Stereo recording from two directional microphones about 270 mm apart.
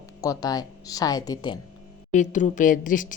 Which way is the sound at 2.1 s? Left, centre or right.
Left.